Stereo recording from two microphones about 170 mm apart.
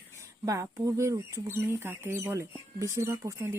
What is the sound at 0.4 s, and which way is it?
Speech, 20° right (ahead or behind).